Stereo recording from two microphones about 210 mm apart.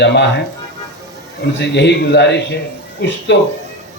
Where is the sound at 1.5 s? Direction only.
55° left (ahead or behind).